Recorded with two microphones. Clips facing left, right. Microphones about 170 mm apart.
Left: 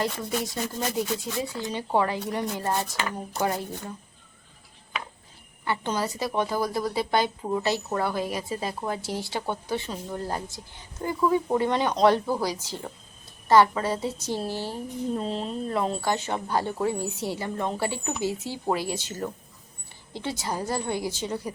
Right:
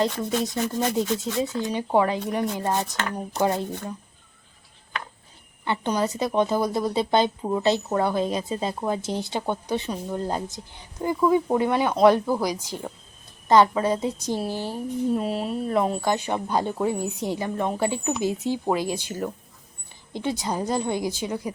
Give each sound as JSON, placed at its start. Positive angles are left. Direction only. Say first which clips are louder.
{"t": 1.4, "sound": "a woman's voice", "louder": "right 5 dB", "side_deg": -20}
{"t": 5.6, "sound": "a woman's voice", "louder": "right 3 dB", "side_deg": -20}